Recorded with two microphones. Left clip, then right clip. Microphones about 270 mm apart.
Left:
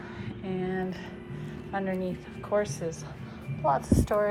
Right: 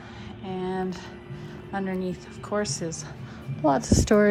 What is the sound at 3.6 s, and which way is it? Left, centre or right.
Speech, right.